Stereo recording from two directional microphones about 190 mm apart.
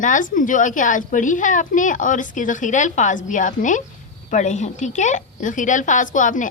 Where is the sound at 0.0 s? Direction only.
45° left (ahead or behind).